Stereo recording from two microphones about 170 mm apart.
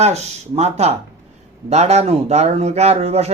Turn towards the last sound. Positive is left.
turn(degrees=-40)  # may be behind; listen again after turning